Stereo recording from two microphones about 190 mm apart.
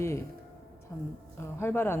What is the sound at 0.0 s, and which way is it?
Music, 15° left (ahead or behind).